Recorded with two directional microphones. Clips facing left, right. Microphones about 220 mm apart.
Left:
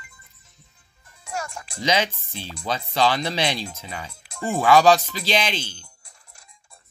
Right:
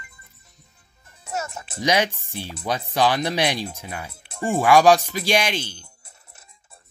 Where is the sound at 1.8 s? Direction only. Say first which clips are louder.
Right 2 dB; 15° right (ahead or behind).